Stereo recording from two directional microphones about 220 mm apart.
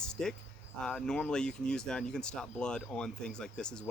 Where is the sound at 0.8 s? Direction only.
5° left (ahead or behind).